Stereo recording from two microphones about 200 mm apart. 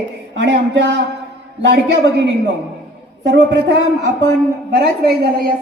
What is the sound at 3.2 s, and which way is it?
A woman's voice, 65° right (ahead or behind).